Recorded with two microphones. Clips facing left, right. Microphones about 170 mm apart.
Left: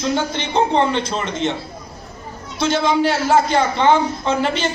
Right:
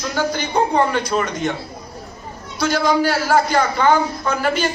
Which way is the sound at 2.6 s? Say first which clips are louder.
Even; 25° left (ahead or behind).